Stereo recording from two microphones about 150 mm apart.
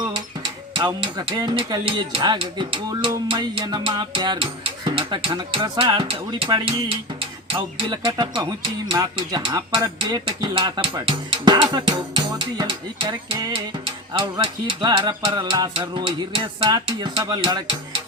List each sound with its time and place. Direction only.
0.7 s speech: 30° right (ahead or behind)